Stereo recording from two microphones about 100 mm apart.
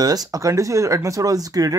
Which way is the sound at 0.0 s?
40° right (ahead or behind).